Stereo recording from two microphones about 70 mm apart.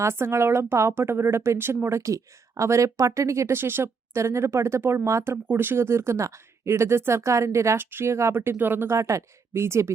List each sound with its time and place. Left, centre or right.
0.0 s speech: right
5.5 s speech: right
7.8 s speech: right
9.0 s a woman's voice: right